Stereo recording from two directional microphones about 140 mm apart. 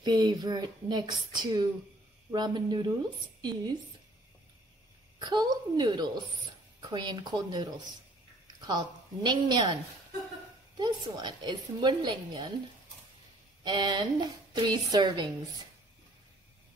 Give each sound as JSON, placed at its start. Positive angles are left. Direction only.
{"t": 0.0, "sound": "a woman's voice", "side_deg": -30}
{"t": 5.2, "sound": "a woman's voice", "side_deg": -30}
{"t": 10.8, "sound": "a woman's voice", "side_deg": -30}
{"t": 13.7, "sound": "a woman's voice", "side_deg": -30}